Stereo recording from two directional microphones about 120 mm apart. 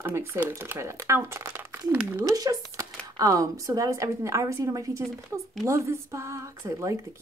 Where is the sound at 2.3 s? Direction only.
30° right (ahead or behind).